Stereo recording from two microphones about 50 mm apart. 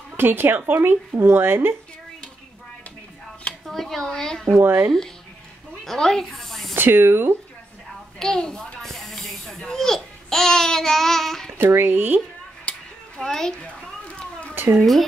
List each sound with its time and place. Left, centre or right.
0.2 s speech: right
1.1 s speech: right
3.6 s a woman's voice: centre
4.5 s speech: right
5.9 s speech: centre
6.7 s speech: right
8.2 s a woman's voice: centre
8.8 s babbling: centre
11.5 s speech: right
12.7 s a sound: left
13.2 s a woman's voice: centre
14.5 s cat: right